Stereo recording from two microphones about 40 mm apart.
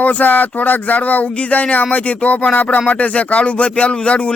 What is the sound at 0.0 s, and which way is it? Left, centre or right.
Speech, left.